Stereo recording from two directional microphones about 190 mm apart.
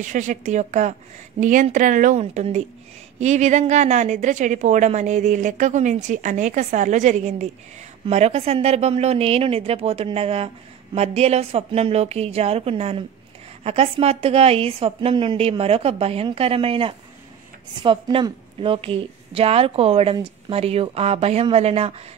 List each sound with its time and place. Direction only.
0.0 s a woman's voice: 40° right (ahead or behind)